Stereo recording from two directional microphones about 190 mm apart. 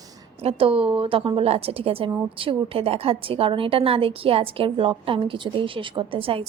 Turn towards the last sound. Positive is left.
turn(degrees=-30)  # may be behind; listen again after turning